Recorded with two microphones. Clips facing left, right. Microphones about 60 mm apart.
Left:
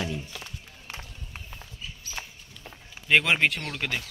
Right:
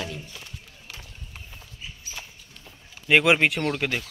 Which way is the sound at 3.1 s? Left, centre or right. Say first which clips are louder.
Right 3 dB; centre.